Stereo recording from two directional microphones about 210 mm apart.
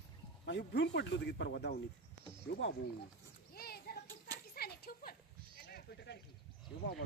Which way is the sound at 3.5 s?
45° left (ahead or behind).